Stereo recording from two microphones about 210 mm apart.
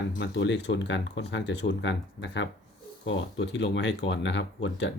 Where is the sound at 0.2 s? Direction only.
60° left (ahead or behind).